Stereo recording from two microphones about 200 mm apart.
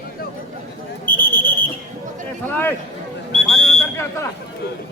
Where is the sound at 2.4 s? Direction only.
10° left (ahead or behind).